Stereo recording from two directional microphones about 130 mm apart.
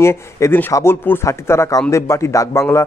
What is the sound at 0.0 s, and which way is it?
Speech, 20° left (ahead or behind).